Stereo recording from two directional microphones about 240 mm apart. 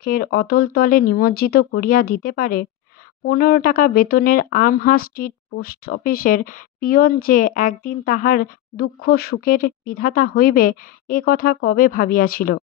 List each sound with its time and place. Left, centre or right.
0.0 s speech: left